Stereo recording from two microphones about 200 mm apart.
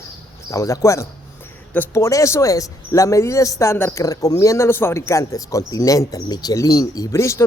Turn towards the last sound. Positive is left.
turn(degrees=15)  # may be behind; listen again after turning